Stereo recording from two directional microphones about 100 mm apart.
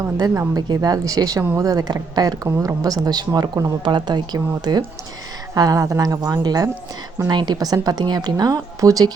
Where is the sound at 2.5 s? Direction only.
25° right (ahead or behind).